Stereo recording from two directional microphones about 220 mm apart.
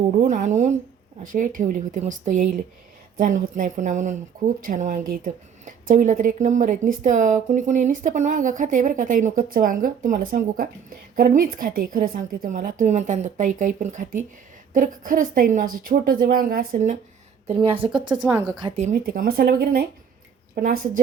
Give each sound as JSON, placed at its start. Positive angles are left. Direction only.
{"t": 0.3, "sound": "a woman's voice", "side_deg": -35}
{"t": 18.1, "sound": "a woman's voice", "side_deg": -10}
{"t": 18.8, "sound": "speech", "side_deg": -35}